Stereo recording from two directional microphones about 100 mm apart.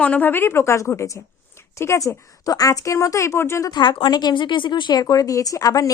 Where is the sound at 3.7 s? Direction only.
50° left (ahead or behind).